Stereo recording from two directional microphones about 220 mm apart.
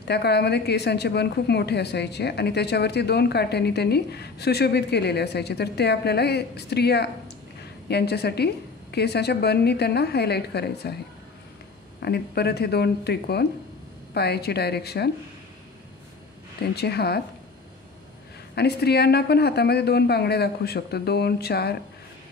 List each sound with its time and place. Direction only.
0.0 s a woman's voice: 50° left (ahead or behind)
12.0 s a woman's voice: 45° left (ahead or behind)
16.7 s a woman's voice: 45° left (ahead or behind)
18.5 s a woman's voice: 50° left (ahead or behind)